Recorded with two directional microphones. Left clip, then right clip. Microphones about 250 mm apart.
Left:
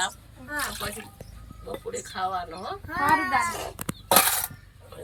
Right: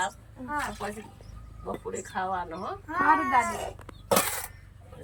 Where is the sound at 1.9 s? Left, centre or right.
Centre.